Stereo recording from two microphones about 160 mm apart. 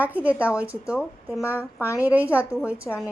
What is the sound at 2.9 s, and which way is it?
Speech, 5° left (ahead or behind).